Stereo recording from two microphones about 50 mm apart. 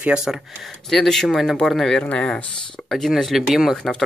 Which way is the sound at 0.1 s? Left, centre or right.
Centre.